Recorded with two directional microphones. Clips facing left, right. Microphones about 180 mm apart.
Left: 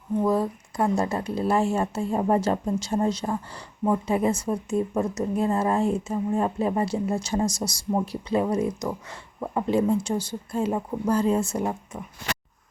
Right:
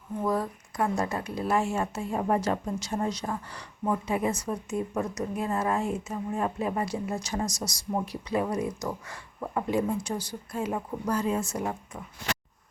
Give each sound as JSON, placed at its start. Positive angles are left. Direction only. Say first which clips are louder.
{"t": 0.2, "sound": "speech", "louder": "left 5 dB", "side_deg": 25}